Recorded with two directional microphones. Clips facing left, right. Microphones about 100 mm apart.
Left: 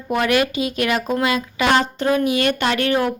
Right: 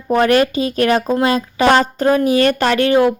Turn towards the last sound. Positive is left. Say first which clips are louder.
# right 6 dB
turn(degrees=-25)  # may be behind; listen again after turning